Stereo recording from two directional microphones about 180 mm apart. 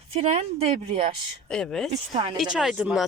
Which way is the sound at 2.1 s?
30° right (ahead or behind).